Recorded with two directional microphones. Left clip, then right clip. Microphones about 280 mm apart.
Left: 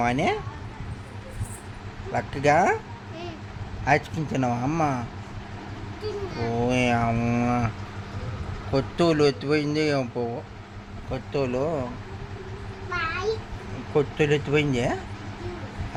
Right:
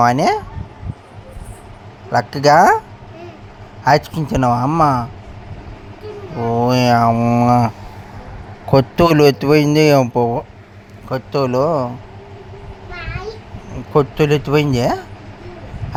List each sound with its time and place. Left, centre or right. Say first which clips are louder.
0.0 s speech: right 11 dB; centre
2.1 s speech: right 10 dB; right
3.8 s speech: right 9 dB; right
6.4 s speech: right 9 dB; right
8.7 s speech: right 11 dB; right
13.9 s speech: right 8 dB; right